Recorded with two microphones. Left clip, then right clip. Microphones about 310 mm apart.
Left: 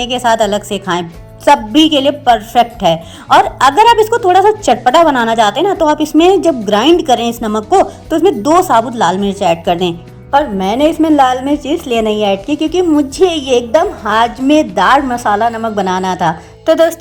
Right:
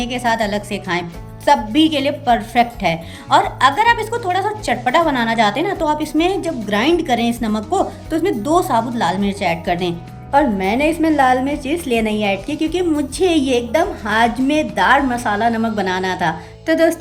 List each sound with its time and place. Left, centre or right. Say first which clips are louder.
0.0 s a woman's voice: left 7 dB; centre